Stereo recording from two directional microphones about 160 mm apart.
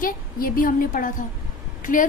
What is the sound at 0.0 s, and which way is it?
A woman's voice, 65° left (ahead or behind).